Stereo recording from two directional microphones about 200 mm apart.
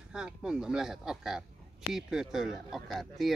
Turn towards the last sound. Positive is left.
turn(degrees=0)  # may be behind; listen again after turning